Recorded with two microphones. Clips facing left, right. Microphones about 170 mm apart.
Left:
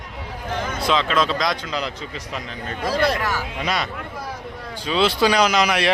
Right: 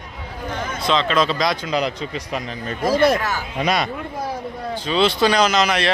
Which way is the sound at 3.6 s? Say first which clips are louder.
Right 5 dB; 15° right (ahead or behind).